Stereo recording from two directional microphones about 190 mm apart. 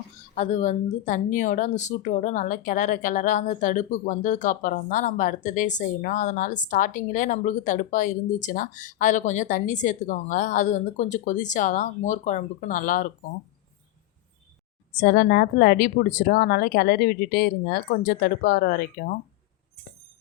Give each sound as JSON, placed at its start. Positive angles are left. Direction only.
{"t": 0.3, "sound": "speech", "side_deg": 40}
{"t": 14.9, "sound": "speech", "side_deg": 55}